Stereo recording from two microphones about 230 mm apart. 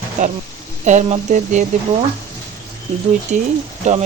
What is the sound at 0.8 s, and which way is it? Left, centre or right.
Speech, right.